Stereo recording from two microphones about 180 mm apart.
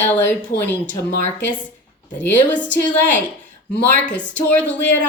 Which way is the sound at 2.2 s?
10° left (ahead or behind).